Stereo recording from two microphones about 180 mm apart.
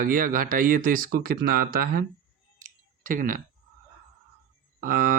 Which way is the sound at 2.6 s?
50° right (ahead or behind).